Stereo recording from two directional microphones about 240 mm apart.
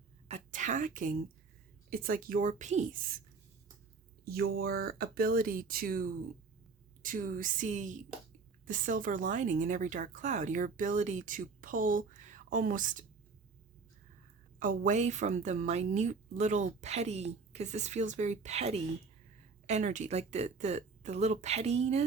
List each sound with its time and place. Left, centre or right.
0.3 s a sound: right
1.9 s speech: right
4.3 s speech: right
14.6 s a woman's voice: right